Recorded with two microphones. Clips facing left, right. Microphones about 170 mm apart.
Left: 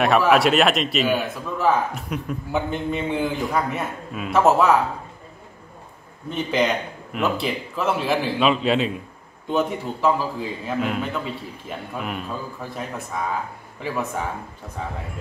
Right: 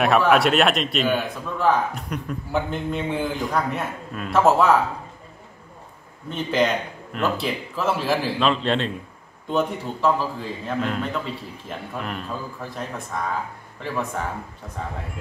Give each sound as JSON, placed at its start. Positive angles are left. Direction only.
{"t": 0.0, "sound": "a man's voice", "side_deg": 0}
{"t": 6.2, "sound": "a man's voice", "side_deg": 0}